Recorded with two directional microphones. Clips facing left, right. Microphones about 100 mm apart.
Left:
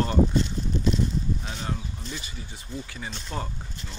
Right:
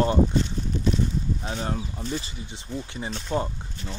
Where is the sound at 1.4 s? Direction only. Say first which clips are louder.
Right 4 dB; 30° right (ahead or behind).